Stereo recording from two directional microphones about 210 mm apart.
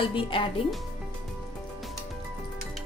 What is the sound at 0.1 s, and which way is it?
Speech, 25° left (ahead or behind).